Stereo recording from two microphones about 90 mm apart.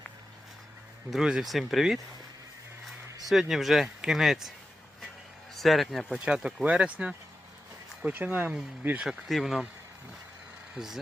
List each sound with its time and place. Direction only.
1.1 s speech: 5° right (ahead or behind)
3.2 s speech: centre (ahead or behind)
5.5 s speech: centre (ahead or behind)
6.1 s speech: 10° right (ahead or behind)
9.0 s speech: centre (ahead or behind)